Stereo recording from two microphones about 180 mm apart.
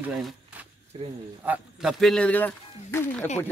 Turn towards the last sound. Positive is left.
turn(degrees=10)  # may be behind; listen again after turning